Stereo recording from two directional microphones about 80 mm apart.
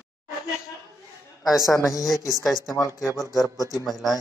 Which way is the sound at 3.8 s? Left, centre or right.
Centre.